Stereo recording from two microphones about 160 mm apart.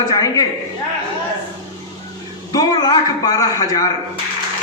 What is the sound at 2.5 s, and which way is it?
A man's voice, 25° left (ahead or behind).